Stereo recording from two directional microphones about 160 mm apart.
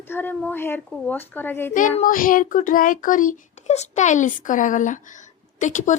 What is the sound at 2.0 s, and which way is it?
A woman's voice, 60° left (ahead or behind).